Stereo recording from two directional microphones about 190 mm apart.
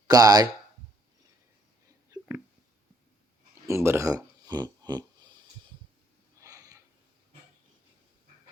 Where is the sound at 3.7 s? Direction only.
15° right (ahead or behind).